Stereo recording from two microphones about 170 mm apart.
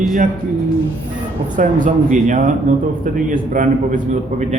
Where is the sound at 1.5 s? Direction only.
50° right (ahead or behind).